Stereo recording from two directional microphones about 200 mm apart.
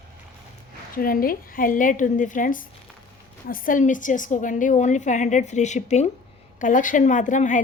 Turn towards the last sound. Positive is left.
turn(degrees=40)  # may be behind; listen again after turning